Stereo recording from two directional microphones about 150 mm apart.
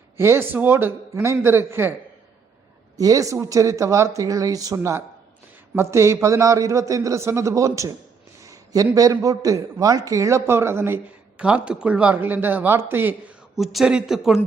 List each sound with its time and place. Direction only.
0.2 s a man's voice: 15° right (ahead or behind)
3.0 s a man's voice: 25° right (ahead or behind); by 14.4 s 5° right (ahead or behind)